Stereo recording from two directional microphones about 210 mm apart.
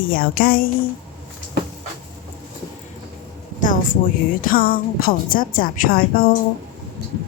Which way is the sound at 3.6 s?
40° left (ahead or behind).